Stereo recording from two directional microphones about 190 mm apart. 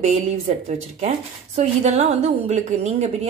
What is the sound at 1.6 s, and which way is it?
A woman's voice, 35° right (ahead or behind).